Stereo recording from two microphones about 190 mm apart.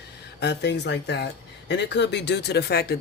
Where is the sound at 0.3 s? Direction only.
65° left (ahead or behind).